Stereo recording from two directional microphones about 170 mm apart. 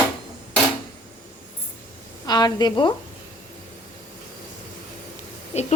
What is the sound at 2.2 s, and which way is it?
Speech, 25° left (ahead or behind).